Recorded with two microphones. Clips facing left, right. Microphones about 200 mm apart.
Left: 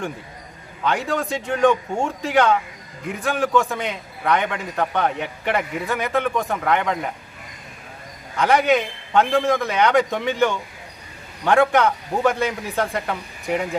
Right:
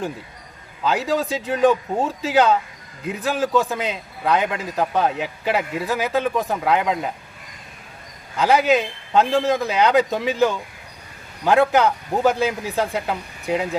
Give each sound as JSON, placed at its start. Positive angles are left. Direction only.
{"t": 0.9, "sound": "a man's voice", "side_deg": -5}
{"t": 8.4, "sound": "a man's voice", "side_deg": 0}